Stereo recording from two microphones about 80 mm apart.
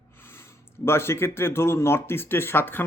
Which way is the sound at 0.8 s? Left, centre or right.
Left.